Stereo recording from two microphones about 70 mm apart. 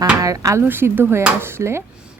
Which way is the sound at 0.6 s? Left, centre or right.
Right.